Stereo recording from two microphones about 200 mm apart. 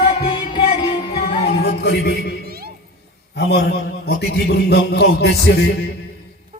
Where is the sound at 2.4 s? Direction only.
50° right (ahead or behind).